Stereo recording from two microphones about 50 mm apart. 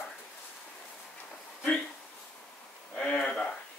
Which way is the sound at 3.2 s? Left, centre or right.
Centre.